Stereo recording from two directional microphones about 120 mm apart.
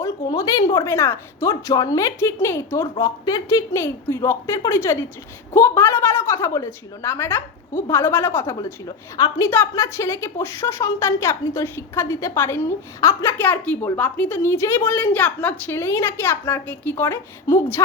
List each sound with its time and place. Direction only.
0.0 s a woman's voice: 30° left (ahead or behind)
9.1 s a woman's voice: 30° left (ahead or behind)